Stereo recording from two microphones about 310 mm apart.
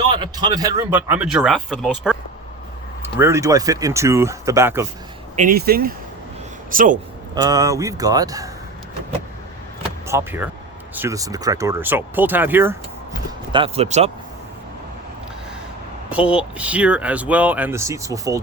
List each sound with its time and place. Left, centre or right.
0.1 s speech: centre
5.4 s speech: right
7.3 s speech: centre
10.1 s speech: centre
13.5 s speech: centre
16.0 s speech: centre